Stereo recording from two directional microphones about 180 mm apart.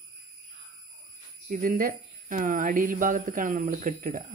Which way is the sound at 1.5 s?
50° right (ahead or behind).